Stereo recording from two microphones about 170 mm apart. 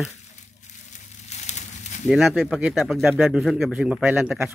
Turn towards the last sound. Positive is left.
turn(degrees=-5)  # may be behind; listen again after turning